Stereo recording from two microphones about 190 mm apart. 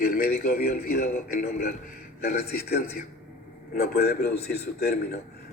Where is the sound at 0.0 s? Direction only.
50° left (ahead or behind).